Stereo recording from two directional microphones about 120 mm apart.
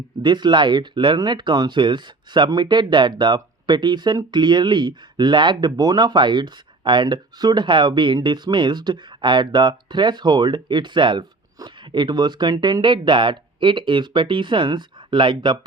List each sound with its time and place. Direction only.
0.2 s speech: 40° right (ahead or behind)